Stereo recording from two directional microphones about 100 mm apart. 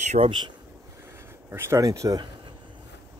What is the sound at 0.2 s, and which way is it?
Speech, 55° right (ahead or behind).